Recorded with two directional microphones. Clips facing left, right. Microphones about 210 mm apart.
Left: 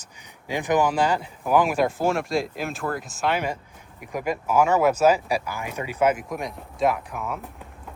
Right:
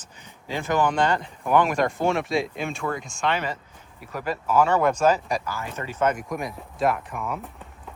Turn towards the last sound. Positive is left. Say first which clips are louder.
# even
turn(degrees=0)  # may be behind; listen again after turning